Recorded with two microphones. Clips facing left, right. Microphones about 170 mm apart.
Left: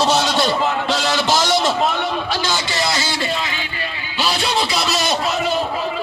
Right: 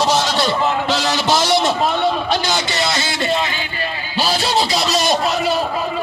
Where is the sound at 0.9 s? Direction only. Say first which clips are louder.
Right 1 dB; 25° right (ahead or behind).